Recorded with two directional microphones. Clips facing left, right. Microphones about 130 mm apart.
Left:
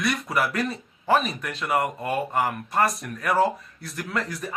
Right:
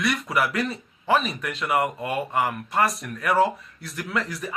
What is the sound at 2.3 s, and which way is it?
Speech, 40° left (ahead or behind).